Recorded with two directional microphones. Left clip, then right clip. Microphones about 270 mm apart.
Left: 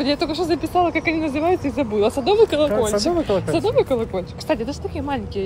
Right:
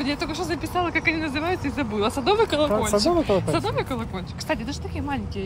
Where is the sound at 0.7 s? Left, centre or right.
Right.